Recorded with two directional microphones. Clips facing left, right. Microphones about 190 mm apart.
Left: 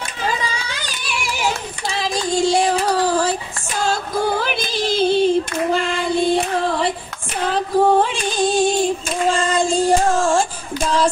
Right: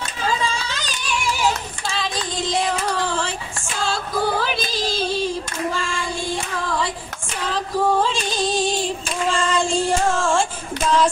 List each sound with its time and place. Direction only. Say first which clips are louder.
0.5 s child singing: right 1 dB; 10° left (ahead or behind)
1.9 s child singing: left 5 dB; 25° left (ahead or behind)
3.8 s female singing: left 2 dB; 50° left (ahead or behind)